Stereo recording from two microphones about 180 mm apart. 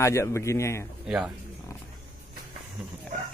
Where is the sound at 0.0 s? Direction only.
15° left (ahead or behind).